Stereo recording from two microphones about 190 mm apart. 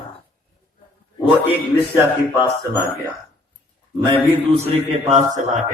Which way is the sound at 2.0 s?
10° right (ahead or behind).